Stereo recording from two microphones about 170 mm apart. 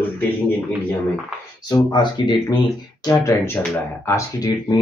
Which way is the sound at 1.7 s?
25° left (ahead or behind).